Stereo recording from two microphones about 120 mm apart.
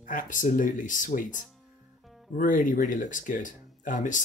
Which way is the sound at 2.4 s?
90° left.